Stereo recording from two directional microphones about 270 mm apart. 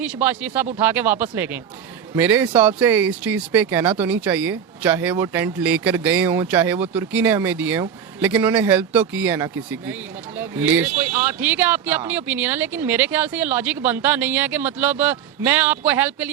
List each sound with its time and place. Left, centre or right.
0.0 s speech: centre